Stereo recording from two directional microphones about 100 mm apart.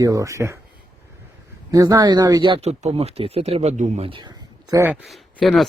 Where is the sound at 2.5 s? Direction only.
90° right.